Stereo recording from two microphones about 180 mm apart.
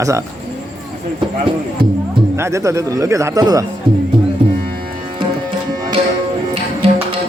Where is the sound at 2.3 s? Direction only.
15° right (ahead or behind).